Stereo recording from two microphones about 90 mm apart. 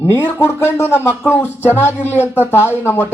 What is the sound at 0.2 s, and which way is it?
Speech, 25° left (ahead or behind).